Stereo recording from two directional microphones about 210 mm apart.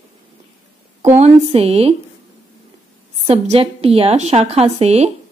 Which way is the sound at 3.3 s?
30° right (ahead or behind).